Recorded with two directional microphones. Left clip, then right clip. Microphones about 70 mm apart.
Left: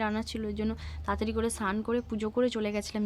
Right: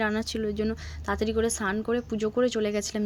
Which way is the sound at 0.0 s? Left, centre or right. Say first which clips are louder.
Right 5 dB; right.